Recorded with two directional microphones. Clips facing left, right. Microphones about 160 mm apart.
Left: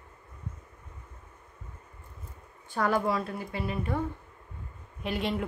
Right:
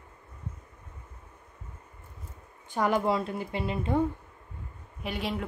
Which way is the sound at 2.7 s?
20° right (ahead or behind).